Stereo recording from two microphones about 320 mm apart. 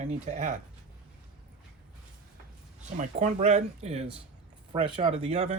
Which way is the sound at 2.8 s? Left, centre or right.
Right.